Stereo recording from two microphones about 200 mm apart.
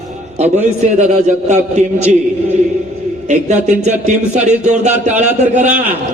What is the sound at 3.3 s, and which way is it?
A man's voice, 35° right (ahead or behind).